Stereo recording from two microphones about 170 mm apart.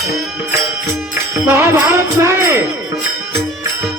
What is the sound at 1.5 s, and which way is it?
Music, 15° right (ahead or behind).